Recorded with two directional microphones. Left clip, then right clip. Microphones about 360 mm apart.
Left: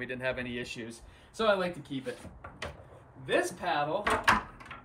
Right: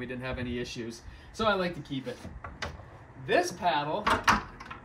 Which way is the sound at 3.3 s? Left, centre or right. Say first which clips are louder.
Right 3 dB; centre.